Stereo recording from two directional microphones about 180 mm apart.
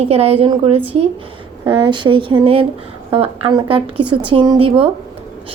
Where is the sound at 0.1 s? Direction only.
35° right (ahead or behind).